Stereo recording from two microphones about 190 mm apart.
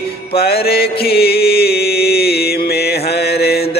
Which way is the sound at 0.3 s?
55° left (ahead or behind).